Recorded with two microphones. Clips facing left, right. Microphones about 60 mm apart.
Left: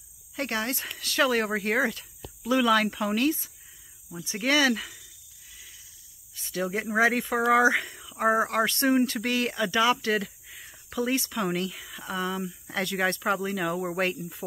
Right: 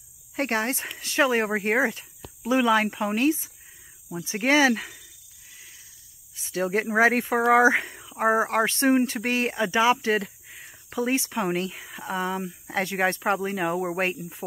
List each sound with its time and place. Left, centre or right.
0.4 s speech: right
4.7 s speech: right
6.5 s speech: right